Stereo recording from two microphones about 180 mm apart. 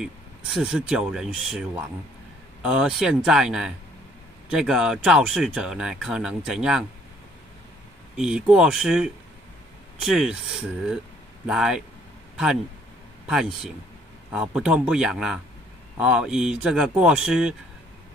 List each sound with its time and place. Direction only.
0.0 s speech: 5° right (ahead or behind)
8.2 s speech: 5° right (ahead or behind)
13.3 s speech: centre (ahead or behind)